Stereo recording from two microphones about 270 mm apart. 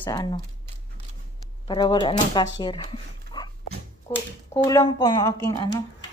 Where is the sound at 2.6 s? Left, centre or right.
Centre.